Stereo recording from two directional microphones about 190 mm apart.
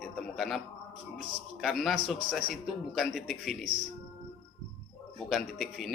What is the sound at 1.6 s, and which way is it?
A man's voice, centre (ahead or behind).